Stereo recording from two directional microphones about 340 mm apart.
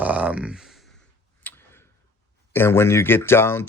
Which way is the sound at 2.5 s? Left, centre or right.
Centre.